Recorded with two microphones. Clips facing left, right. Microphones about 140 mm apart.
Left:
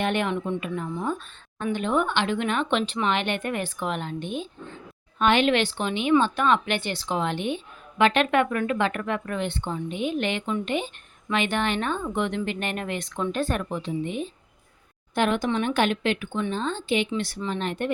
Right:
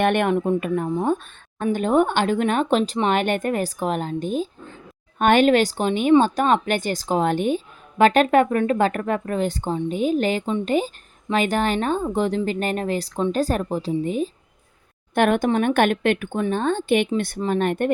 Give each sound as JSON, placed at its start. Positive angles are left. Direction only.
{"t": 0.0, "sound": "speech", "side_deg": -55}
{"t": 15.1, "sound": "speech", "side_deg": -55}